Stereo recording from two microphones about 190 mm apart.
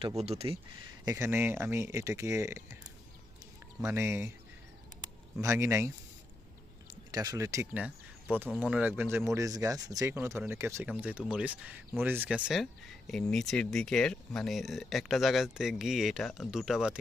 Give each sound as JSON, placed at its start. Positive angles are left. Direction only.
{"t": 0.0, "sound": "speech", "side_deg": -30}
{"t": 1.0, "sound": "speech", "side_deg": -15}
{"t": 3.8, "sound": "speech", "side_deg": -15}
{"t": 5.4, "sound": "speech", "side_deg": -15}
{"t": 7.1, "sound": "speech", "side_deg": -20}